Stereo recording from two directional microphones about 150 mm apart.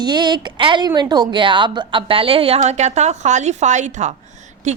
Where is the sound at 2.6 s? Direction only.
50° right (ahead or behind).